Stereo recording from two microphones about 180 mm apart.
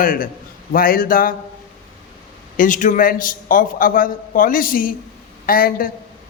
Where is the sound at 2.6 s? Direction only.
45° left (ahead or behind).